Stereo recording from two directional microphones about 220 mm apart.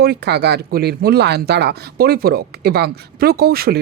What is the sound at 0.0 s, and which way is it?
Speech, 45° right (ahead or behind).